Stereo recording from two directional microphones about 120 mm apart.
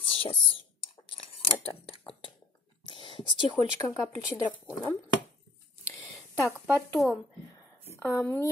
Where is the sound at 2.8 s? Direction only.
45° left (ahead or behind).